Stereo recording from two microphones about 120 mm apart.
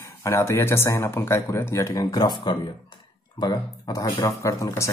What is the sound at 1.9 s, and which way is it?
Speech, 35° left (ahead or behind).